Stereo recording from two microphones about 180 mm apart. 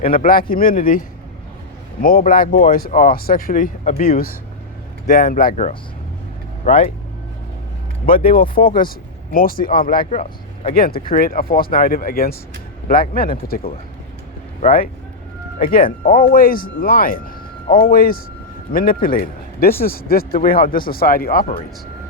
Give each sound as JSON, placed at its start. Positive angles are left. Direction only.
{"t": 0.0, "sound": "speech", "side_deg": 50}
{"t": 8.0, "sound": "speech", "side_deg": 50}
{"t": 10.2, "sound": "vehicle", "side_deg": 30}
{"t": 10.8, "sound": "speech", "side_deg": 55}
{"t": 14.6, "sound": "speech", "side_deg": 35}
{"t": 15.5, "sound": "speech", "side_deg": 50}